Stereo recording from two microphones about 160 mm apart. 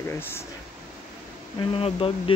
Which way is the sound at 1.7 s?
35° left (ahead or behind).